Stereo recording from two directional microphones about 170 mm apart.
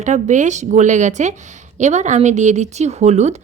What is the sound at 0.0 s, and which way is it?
A woman's voice, 45° right (ahead or behind).